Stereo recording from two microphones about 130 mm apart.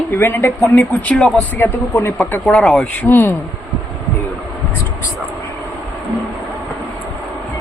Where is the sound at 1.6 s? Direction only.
20° left (ahead or behind).